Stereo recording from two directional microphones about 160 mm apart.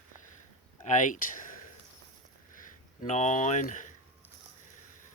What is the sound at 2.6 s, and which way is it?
Speech, 50° left (ahead or behind).